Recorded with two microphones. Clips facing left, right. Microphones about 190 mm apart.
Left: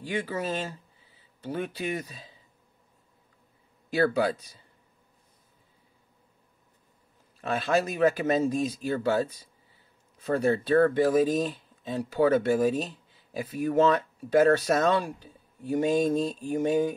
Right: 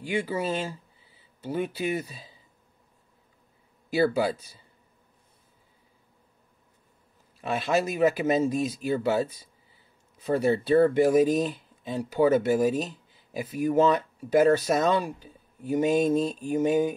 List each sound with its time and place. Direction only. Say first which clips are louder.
0.0 s speech: right 2 dB; 10° right (ahead or behind)
3.9 s speech: right 1 dB; 5° right (ahead or behind)
7.3 s speech: even; 5° right (ahead or behind)